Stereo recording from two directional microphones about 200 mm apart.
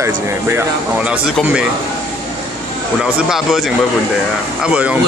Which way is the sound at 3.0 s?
Centre (ahead or behind).